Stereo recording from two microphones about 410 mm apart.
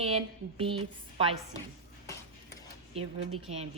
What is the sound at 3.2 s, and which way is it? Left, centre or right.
Speech, right.